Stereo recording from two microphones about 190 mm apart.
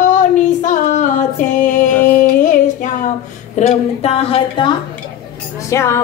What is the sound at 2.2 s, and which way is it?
Music, 40° left (ahead or behind).